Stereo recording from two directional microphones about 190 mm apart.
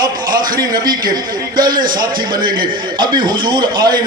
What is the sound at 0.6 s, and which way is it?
Speech, 20° right (ahead or behind).